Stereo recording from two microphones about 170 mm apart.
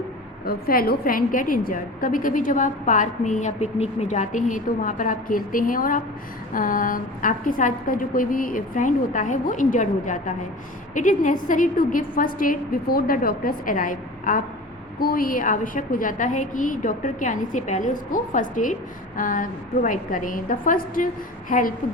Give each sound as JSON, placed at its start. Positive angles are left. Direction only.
{"t": 0.4, "sound": "a woman's voice", "side_deg": 60}